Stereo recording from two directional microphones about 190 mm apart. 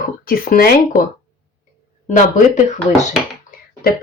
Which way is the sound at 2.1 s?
40° left (ahead or behind).